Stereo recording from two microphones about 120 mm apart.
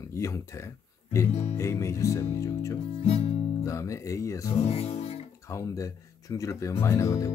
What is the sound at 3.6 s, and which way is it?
Speech, 25° left (ahead or behind).